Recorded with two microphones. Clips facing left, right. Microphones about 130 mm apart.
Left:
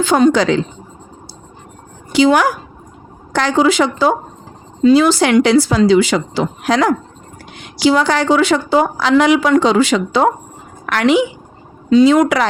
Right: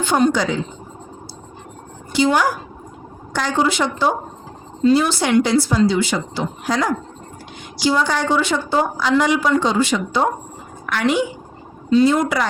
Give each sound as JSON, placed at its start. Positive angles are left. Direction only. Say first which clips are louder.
{"t": 0.0, "sound": "a woman's voice", "louder": "left 5 dB", "side_deg": 90}
{"t": 2.1, "sound": "a woman's voice", "louder": "left 5 dB", "side_deg": 90}